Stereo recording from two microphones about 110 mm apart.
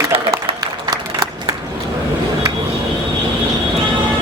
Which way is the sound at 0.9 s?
35° right (ahead or behind).